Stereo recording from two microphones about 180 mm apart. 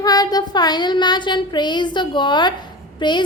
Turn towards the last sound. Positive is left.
turn(degrees=25)  # may be behind; listen again after turning